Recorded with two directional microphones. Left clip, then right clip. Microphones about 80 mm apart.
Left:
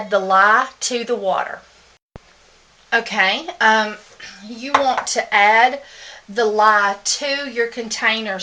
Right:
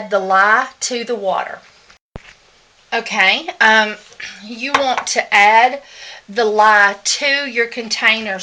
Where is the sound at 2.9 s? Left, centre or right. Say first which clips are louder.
Right 2 dB; centre.